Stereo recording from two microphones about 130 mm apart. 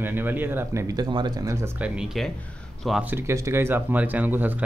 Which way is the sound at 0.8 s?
30° right (ahead or behind).